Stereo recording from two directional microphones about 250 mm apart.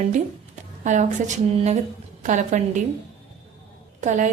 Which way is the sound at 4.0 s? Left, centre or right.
Right.